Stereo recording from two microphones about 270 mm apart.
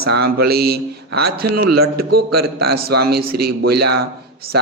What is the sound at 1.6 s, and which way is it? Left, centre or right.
Speech, right.